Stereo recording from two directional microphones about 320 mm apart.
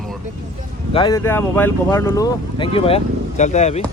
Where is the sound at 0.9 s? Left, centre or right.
Centre.